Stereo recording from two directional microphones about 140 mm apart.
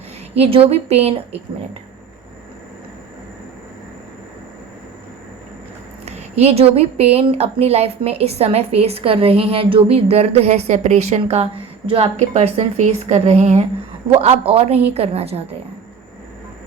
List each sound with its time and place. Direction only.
0.3 s a woman's voice: 45° right (ahead or behind)
6.1 s a woman's voice: 50° right (ahead or behind)